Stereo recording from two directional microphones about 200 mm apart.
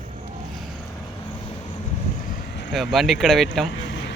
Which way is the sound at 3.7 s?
60° left (ahead or behind).